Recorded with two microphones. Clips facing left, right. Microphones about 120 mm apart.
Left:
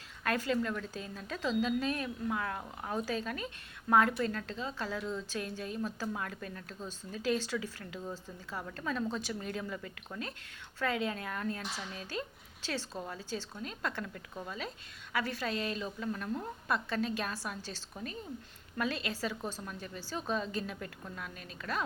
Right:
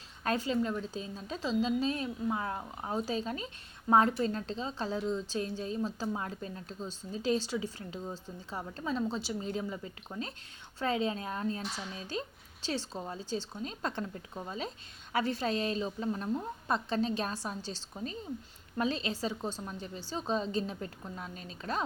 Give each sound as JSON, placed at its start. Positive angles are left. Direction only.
{"t": 0.3, "sound": "a woman's voice", "side_deg": -20}